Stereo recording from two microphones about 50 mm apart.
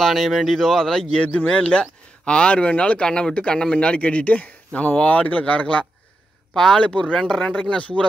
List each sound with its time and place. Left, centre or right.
0.0 s speech: centre
1.2 s speech: left
6.5 s speech: centre
6.8 s speech: left
7.2 s speech: centre